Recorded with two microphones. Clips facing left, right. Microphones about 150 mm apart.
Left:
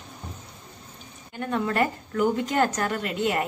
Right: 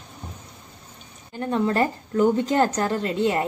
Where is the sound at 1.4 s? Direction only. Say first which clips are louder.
Right 3 dB; 30° right (ahead or behind).